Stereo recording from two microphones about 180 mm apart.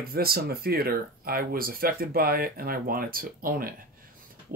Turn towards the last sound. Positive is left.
turn(degrees=-50)  # may be behind; listen again after turning